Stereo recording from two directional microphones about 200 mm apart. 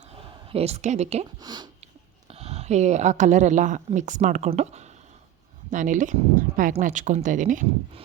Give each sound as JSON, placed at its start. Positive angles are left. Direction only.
{"t": 0.5, "sound": "speech", "side_deg": -30}
{"t": 1.4, "sound": "speech", "side_deg": -20}
{"t": 2.2, "sound": "speech", "side_deg": -30}